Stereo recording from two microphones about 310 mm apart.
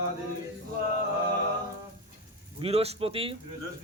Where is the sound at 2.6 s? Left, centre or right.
Centre.